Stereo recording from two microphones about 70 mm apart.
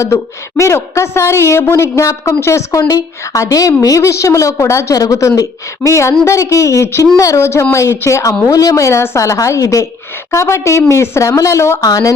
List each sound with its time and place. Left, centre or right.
0.0 s a woman's voice: left
6.8 s a woman's voice: left
11.9 s speech: left